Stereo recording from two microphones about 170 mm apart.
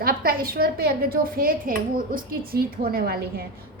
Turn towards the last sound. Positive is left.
turn(degrees=-65)  # may be behind; listen again after turning